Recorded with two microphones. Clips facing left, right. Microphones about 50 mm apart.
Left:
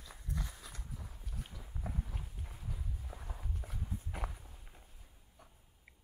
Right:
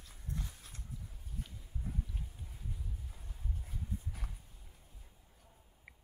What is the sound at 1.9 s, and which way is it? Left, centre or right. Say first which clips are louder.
Clip-clop: even; left.